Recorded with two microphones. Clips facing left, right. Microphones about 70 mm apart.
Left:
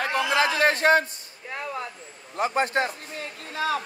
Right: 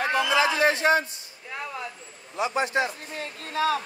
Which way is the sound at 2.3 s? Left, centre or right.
Left.